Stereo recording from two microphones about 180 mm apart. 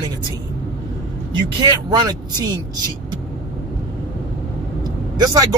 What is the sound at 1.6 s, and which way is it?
Speech, 25° right (ahead or behind).